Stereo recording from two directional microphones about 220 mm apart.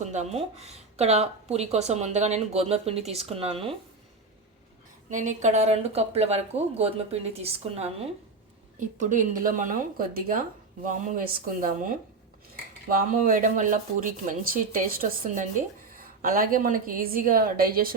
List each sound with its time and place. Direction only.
0.0 s speech: 30° right (ahead or behind)
5.1 s speech: 35° right (ahead or behind)